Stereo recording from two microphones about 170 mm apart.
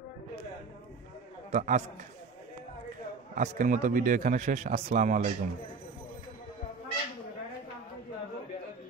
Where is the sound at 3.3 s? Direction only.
50° right (ahead or behind).